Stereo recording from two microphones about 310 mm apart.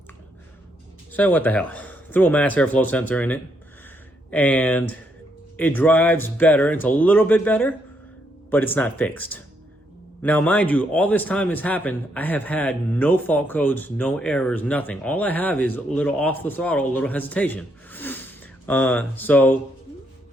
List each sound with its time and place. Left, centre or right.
1.1 s speech: centre